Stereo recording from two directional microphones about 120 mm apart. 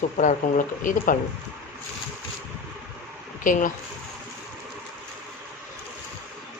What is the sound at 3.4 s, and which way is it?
Speech, 90° left.